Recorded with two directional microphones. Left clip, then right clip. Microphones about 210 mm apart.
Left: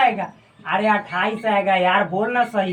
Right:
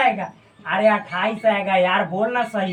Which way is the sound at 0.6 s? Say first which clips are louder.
Right 1 dB; 5° right (ahead or behind).